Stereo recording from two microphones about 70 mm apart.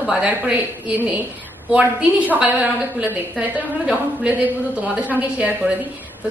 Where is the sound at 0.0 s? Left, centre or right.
Centre.